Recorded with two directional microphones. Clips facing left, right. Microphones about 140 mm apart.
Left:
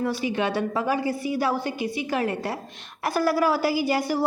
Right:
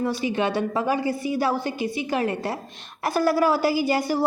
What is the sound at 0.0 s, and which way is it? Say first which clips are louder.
A woman's voice: right 1 dB; 25° right (ahead or behind).